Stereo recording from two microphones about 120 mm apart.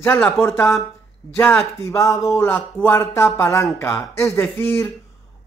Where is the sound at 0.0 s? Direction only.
20° left (ahead or behind).